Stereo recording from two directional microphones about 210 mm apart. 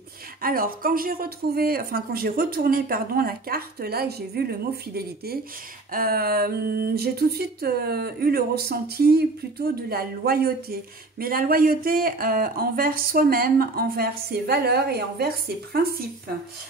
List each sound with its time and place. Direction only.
0.4 s speech: 45° right (ahead or behind)